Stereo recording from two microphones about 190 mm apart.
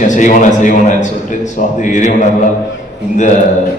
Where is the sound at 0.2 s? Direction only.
45° left (ahead or behind).